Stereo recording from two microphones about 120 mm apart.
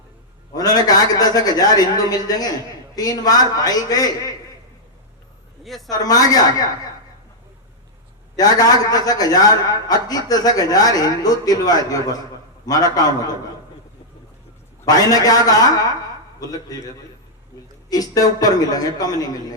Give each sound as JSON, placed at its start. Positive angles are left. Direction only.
{"t": 0.5, "sound": "a man's voice", "side_deg": 30}
{"t": 5.6, "sound": "speech", "side_deg": 0}
{"t": 5.9, "sound": "a man's voice", "side_deg": 30}
{"t": 8.4, "sound": "a man's voice", "side_deg": 30}
{"t": 14.8, "sound": "a man's voice", "side_deg": 30}
{"t": 17.8, "sound": "a man's voice", "side_deg": 30}